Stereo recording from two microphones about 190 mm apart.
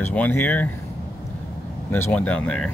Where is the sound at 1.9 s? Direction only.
10° left (ahead or behind).